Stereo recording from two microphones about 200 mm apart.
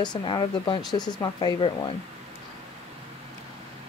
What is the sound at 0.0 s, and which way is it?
Speech, 20° left (ahead or behind).